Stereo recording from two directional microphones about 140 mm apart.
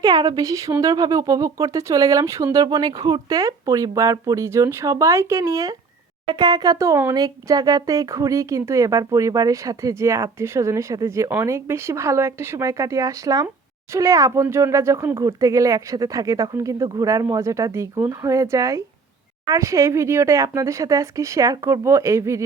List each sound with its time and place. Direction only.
0.0 s speech: 30° right (ahead or behind)